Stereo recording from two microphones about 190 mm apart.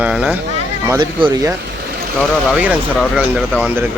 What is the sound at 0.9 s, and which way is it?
Speech, 20° right (ahead or behind).